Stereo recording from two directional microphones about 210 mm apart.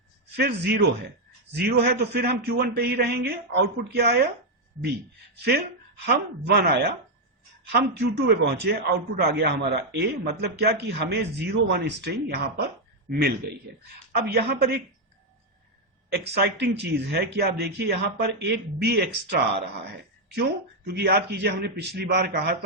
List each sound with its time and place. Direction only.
0.3 s a man's voice: 50° right (ahead or behind)
6.1 s a man's voice: 50° right (ahead or behind)
16.1 s a man's voice: 50° right (ahead or behind)